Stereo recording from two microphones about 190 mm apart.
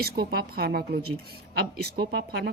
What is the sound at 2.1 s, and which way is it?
Speech, 60° right (ahead or behind).